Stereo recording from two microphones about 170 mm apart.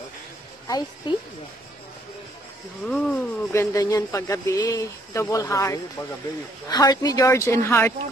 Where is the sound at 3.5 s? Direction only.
15° left (ahead or behind).